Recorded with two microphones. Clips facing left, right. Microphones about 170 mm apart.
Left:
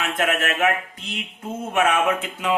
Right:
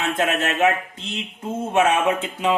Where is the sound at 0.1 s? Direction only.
25° right (ahead or behind).